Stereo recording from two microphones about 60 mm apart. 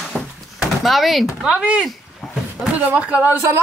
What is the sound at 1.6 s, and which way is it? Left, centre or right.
Speech, right.